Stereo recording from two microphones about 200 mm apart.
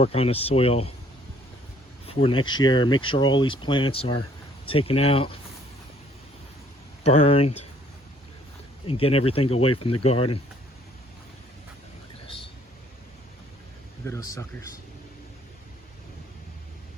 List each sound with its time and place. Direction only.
0.0 s speech: 30° left (ahead or behind)
2.0 s speech: 25° left (ahead or behind)
7.0 s speech: 30° left (ahead or behind)
8.9 s speech: 30° left (ahead or behind)
14.0 s speech: 15° left (ahead or behind)